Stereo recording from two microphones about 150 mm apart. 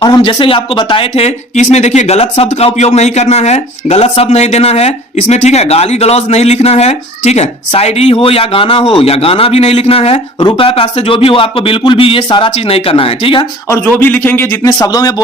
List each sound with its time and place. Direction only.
0.0 s speech: 30° left (ahead or behind)
13.7 s a man's voice: 15° left (ahead or behind)